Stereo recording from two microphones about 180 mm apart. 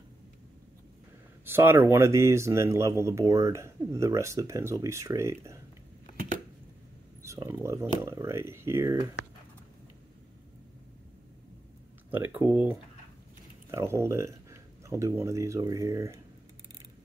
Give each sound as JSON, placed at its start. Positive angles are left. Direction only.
{"t": 1.4, "sound": "speech", "side_deg": -10}
{"t": 7.2, "sound": "speech", "side_deg": -15}
{"t": 12.1, "sound": "speech", "side_deg": -10}
{"t": 13.7, "sound": "speech", "side_deg": -15}